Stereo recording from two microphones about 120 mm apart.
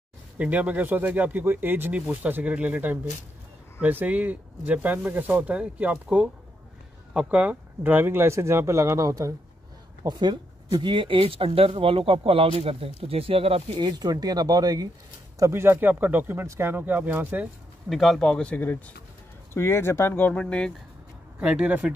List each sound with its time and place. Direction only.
0.4 s speech: 10° right (ahead or behind)
17.8 s speech: centre (ahead or behind)
21.4 s speech: 10° right (ahead or behind)